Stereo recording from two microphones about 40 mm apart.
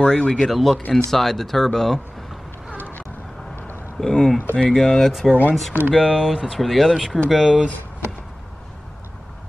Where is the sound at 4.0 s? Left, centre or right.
Centre.